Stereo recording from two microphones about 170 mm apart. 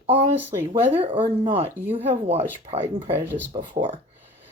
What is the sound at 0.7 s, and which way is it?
Speech, 30° right (ahead or behind).